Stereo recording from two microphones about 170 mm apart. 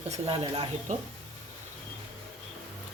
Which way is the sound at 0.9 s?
45° right (ahead or behind).